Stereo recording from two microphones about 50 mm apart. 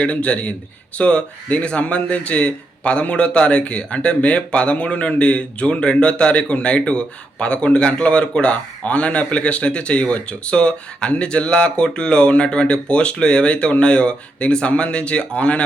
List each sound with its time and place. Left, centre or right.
0.0 s speech: left